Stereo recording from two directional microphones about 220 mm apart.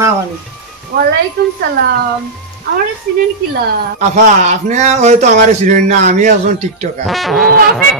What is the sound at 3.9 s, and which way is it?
Speech, 35° right (ahead or behind).